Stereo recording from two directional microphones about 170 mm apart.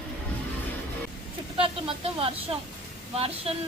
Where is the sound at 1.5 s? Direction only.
35° right (ahead or behind).